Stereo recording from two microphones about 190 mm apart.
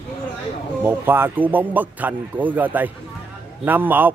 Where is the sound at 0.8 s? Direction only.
10° right (ahead or behind).